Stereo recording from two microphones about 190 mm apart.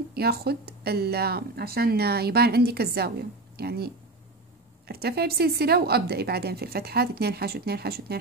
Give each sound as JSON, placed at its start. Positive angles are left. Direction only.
{"t": 0.1, "sound": "speech", "side_deg": -55}